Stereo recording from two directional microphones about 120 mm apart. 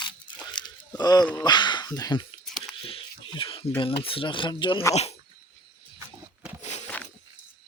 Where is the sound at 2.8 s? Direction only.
45° left (ahead or behind).